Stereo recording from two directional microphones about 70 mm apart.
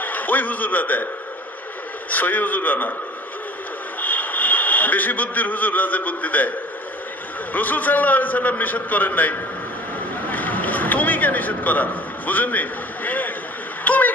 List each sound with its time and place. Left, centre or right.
0.0 s a man's voice: left
2.0 s a man's voice: left
4.0 s speech: left
7.5 s a man's voice: left
10.3 s a sound: left